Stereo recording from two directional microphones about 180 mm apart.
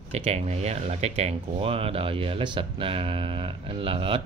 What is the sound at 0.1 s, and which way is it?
Speech, 35° right (ahead or behind).